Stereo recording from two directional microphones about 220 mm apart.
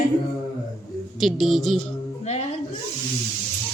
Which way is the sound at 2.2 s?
30° left (ahead or behind).